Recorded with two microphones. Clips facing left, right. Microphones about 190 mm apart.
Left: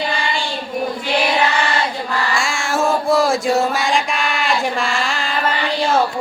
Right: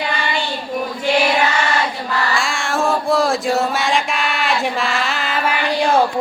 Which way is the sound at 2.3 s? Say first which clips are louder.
Even; centre (ahead or behind).